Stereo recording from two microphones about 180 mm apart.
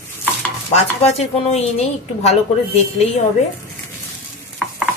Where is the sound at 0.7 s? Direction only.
35° left (ahead or behind).